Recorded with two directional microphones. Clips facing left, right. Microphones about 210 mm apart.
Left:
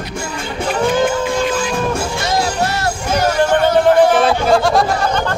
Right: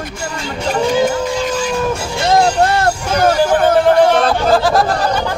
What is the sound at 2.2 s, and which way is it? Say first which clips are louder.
Music: right 8 dB; 55° right (ahead or behind).